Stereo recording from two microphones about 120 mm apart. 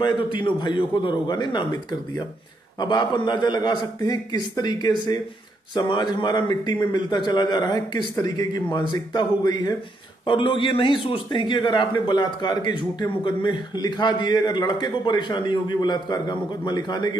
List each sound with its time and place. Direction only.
0.0 s a man's voice: 40° left (ahead or behind)
5.9 s a man's voice: 40° left (ahead or behind)